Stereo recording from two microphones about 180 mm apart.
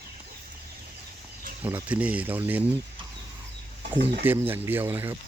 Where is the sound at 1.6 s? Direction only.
10° right (ahead or behind).